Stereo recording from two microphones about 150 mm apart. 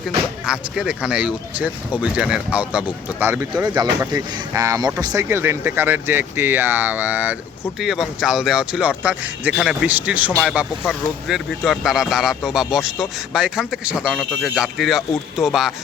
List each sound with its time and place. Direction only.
0.4 s speech: 5° right (ahead or behind)
4.1 s speech: 30° right (ahead or behind); by 15.7 s centre (ahead or behind)